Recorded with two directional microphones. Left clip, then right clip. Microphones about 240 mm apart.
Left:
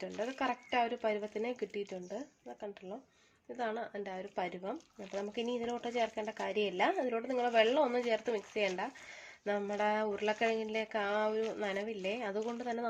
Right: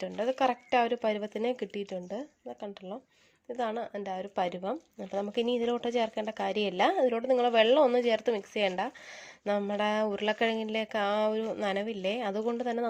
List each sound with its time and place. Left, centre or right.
0.0 s speech: right